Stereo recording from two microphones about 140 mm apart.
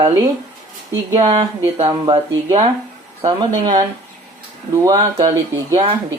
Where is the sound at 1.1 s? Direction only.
30° right (ahead or behind).